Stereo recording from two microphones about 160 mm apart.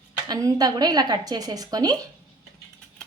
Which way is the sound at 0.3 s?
25° right (ahead or behind).